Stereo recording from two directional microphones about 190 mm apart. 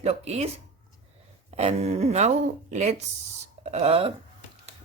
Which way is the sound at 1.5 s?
35° right (ahead or behind).